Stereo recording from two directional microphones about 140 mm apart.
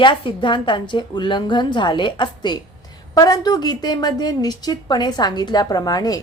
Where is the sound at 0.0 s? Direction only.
35° left (ahead or behind).